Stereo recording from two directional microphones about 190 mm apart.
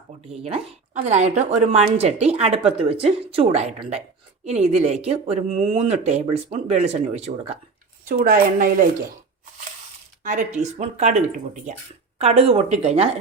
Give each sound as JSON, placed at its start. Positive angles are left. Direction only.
{"t": 0.3, "sound": "a woman's voice", "side_deg": -30}
{"t": 8.0, "sound": "a woman's voice", "side_deg": -45}
{"t": 10.2, "sound": "a woman's voice", "side_deg": -40}
{"t": 12.2, "sound": "a woman's voice", "side_deg": -30}